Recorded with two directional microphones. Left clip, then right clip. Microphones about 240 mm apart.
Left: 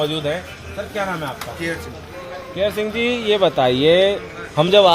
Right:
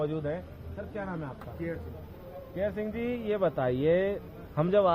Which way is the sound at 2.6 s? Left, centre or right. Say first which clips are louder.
Left 13 dB; left.